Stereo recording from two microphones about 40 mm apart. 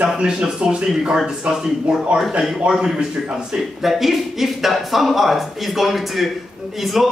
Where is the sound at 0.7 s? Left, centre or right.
Right.